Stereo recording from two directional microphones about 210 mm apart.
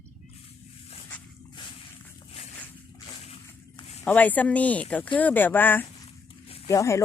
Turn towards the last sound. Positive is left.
turn(degrees=15)  # may be behind; listen again after turning